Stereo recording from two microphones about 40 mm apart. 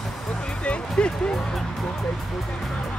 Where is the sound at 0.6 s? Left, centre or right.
Left.